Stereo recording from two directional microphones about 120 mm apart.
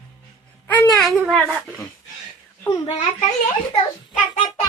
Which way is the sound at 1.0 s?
Centre (ahead or behind).